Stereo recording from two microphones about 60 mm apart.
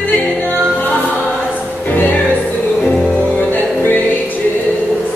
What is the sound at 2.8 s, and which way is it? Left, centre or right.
Music, centre.